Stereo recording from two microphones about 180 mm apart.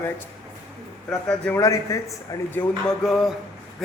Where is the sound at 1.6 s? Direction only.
20° left (ahead or behind).